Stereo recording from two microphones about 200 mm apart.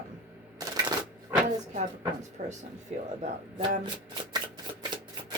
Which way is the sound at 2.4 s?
40° right (ahead or behind).